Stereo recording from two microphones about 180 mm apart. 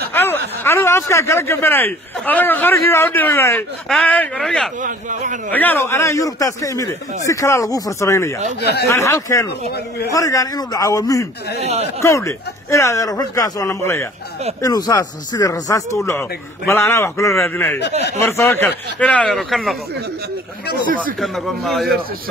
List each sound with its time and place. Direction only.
0.1 s a man's voice: 10° left (ahead or behind)
4.8 s speech: 45° right (ahead or behind)
5.5 s speech: 10° left (ahead or behind)
8.5 s speech: 65° left (ahead or behind)
8.9 s speech: 15° left (ahead or behind)
11.6 s speech: 35° right (ahead or behind)
12.0 s speech: 15° left (ahead or behind); by 19.8 s centre (ahead or behind)
21.0 s a man's voice: centre (ahead or behind)